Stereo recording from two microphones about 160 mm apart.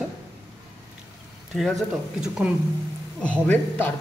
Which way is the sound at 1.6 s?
Centre (ahead or behind).